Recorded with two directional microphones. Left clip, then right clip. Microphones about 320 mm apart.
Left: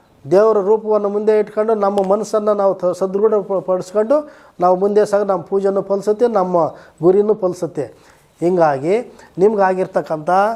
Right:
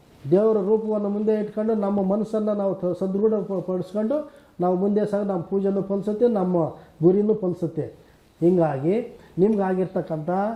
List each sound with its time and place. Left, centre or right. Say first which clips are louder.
0.3 s a man's voice: left 7 dB; centre